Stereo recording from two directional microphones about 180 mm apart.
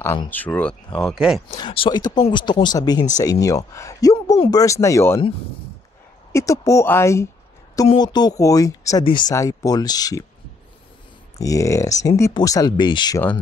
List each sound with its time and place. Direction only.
0.3 s speech: 10° left (ahead or behind)
1.5 s speech: 25° left (ahead or behind)
6.3 s speech: 15° left (ahead or behind)
11.3 s speech: 20° left (ahead or behind)